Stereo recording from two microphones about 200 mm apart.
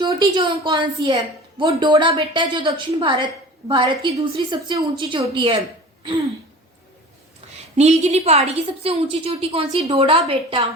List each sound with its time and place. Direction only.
0.0 s a woman's voice: 25° right (ahead or behind)
7.4 s a sound: 30° right (ahead or behind)
7.8 s a woman's voice: 35° right (ahead or behind)